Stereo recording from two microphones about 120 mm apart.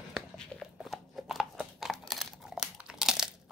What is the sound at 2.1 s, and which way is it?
Crumpling, centre (ahead or behind).